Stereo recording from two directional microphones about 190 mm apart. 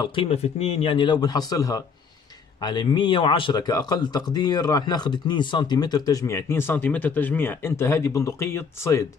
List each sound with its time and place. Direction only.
0.0 s speech: 25° left (ahead or behind)